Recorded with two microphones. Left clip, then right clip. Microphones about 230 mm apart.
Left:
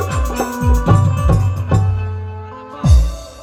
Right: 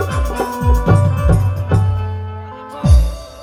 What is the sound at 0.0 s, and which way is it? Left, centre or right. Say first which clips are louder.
Music: right 1 dB; left.